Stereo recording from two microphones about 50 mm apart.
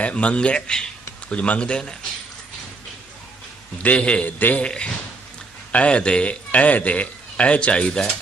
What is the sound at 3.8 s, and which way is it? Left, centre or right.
Speech, left.